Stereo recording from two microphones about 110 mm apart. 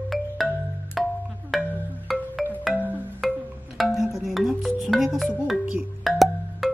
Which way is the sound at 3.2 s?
Centre (ahead or behind).